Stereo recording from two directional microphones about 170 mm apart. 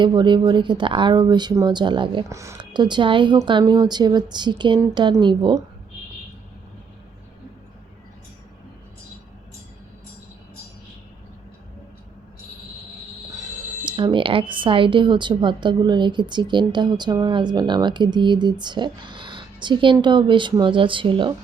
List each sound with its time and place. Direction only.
0.0 s speech: 25° right (ahead or behind)
2.3 s speech: 15° right (ahead or behind)
13.8 s speech: 30° right (ahead or behind)